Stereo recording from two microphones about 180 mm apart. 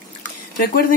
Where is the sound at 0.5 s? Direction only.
55° left (ahead or behind).